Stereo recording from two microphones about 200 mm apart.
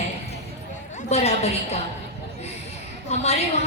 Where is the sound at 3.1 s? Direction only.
35° left (ahead or behind).